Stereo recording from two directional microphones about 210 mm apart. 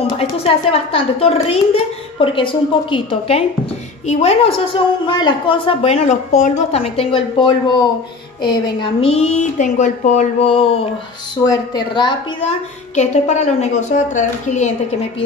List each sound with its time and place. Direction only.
0.0 s a woman's voice: 25° left (ahead or behind)
9.0 s a woman's voice: 30° left (ahead or behind)
11.4 s a woman's voice: 20° left (ahead or behind); by 15.0 s 35° left (ahead or behind)